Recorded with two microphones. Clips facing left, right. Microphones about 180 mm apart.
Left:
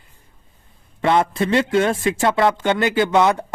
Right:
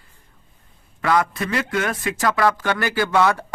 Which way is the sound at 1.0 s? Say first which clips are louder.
Left 3 dB; 25° left (ahead or behind).